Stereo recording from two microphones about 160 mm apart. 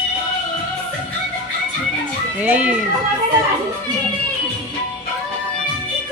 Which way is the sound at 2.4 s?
10° right (ahead or behind).